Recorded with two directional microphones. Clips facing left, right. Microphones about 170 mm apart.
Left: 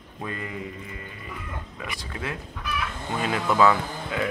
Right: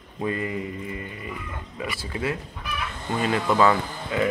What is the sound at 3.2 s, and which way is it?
Speech, centre (ahead or behind).